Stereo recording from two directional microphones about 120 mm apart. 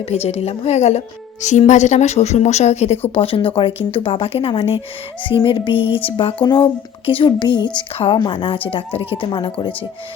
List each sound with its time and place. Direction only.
0.1 s a woman's voice: 60° left (ahead or behind)
3.2 s speech: 50° left (ahead or behind)